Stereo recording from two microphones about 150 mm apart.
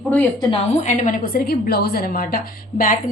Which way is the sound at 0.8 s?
55° left (ahead or behind).